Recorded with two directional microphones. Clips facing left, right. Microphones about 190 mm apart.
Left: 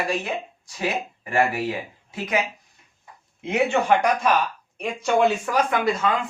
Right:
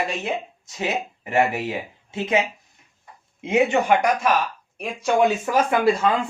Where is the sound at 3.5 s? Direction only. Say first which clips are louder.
Right 2 dB; 20° right (ahead or behind).